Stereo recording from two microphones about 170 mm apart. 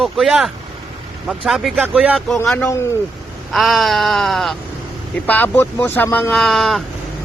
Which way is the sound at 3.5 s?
Centre (ahead or behind).